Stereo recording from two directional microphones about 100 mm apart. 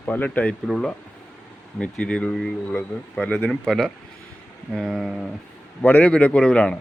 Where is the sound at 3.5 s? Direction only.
5° left (ahead or behind).